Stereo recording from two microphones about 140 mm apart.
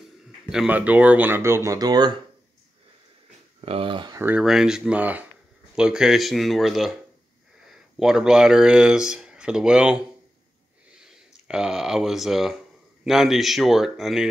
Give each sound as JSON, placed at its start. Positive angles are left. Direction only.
{"t": 0.5, "sound": "speech", "side_deg": -5}
{"t": 3.6, "sound": "speech", "side_deg": -40}
{"t": 4.1, "sound": "speech", "side_deg": -15}
{"t": 4.5, "sound": "speech", "side_deg": -5}
{"t": 8.0, "sound": "speech", "side_deg": -5}